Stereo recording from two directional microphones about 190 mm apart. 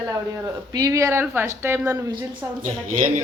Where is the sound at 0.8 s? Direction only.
15° right (ahead or behind).